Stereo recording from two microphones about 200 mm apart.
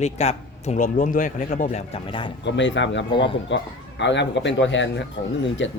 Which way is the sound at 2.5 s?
65° left (ahead or behind).